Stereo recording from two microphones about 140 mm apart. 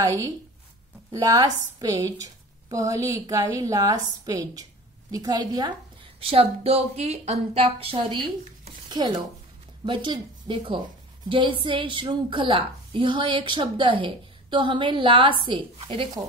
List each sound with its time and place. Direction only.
0.0 s a woman's voice: 25° right (ahead or behind)
6.1 s a woman's voice: 45° right (ahead or behind)